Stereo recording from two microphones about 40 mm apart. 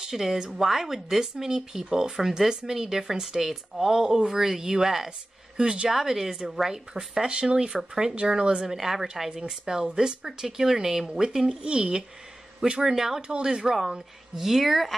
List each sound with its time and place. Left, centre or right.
0.0 s speech: centre
5.9 s speech: centre
8.6 s speech: centre; by 12.0 s right
12.8 s speech: centre
13.3 s speech: right; by 15.0 s centre